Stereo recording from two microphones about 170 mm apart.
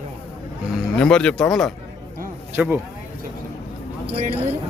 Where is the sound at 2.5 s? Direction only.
10° right (ahead or behind).